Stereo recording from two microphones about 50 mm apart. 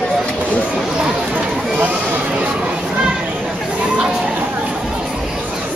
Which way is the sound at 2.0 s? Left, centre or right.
Right.